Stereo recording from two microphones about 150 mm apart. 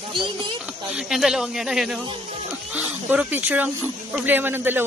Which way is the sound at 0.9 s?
5° right (ahead or behind).